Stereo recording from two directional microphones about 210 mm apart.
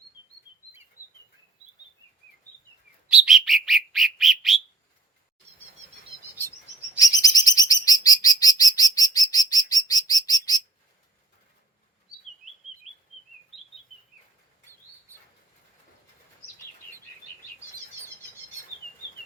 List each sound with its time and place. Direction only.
3.1 s bird: centre (ahead or behind)
7.0 s chirp: 15° left (ahead or behind)